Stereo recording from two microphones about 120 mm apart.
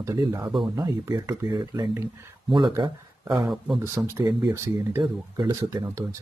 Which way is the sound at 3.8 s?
20° right (ahead or behind).